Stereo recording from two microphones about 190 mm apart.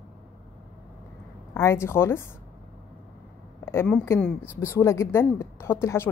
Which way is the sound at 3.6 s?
10° left (ahead or behind).